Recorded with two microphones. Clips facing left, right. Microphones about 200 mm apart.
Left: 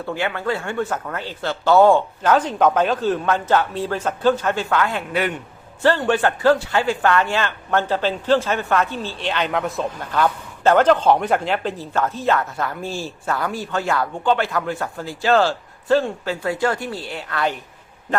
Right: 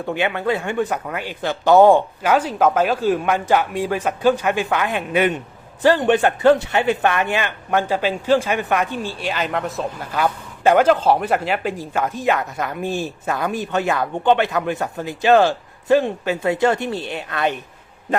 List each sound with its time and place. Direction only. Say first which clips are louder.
0.0 s a man's voice: right 3 dB; 20° right (ahead or behind)